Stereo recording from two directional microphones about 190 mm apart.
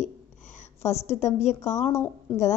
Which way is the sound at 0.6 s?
35° left (ahead or behind).